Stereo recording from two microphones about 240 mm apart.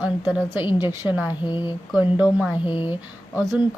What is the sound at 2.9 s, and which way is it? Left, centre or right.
Speech, centre.